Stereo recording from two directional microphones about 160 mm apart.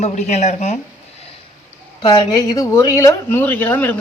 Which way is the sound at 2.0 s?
25° left (ahead or behind).